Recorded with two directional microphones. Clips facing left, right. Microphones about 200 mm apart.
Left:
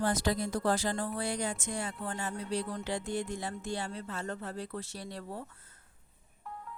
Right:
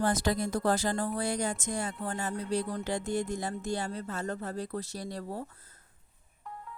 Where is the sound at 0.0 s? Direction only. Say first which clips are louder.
Right 2 dB; 45° right (ahead or behind).